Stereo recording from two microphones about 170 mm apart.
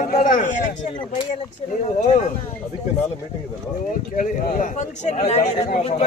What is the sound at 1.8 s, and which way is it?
Speech, 45° left (ahead or behind).